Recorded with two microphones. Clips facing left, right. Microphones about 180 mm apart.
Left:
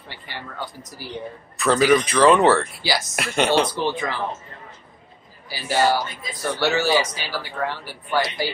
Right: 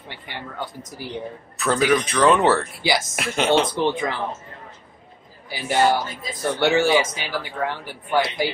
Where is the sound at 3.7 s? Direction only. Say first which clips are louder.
Right 2 dB; 20° right (ahead or behind).